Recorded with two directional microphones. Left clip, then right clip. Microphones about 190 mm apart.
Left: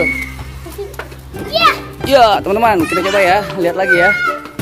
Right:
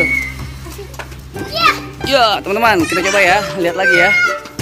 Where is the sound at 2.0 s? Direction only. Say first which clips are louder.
Left 3 dB; 30° left (ahead or behind).